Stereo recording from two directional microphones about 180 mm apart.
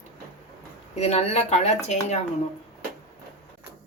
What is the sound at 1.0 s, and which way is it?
A woman's voice, 35° left (ahead or behind).